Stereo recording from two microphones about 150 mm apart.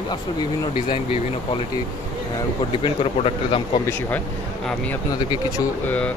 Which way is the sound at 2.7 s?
35° left (ahead or behind).